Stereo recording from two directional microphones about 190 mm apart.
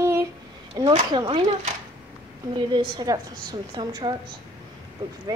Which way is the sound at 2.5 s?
25° right (ahead or behind).